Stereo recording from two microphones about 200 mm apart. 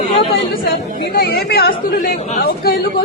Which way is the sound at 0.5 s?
50° left (ahead or behind).